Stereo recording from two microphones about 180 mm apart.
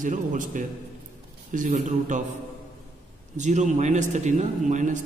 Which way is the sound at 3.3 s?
40° right (ahead or behind).